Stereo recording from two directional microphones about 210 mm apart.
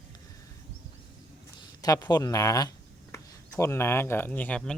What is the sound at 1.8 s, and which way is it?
Speech, 20° left (ahead or behind).